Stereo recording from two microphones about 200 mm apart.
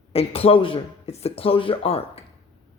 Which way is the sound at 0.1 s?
30° left (ahead or behind).